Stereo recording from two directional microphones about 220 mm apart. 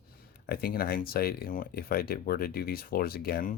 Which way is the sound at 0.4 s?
40° left (ahead or behind).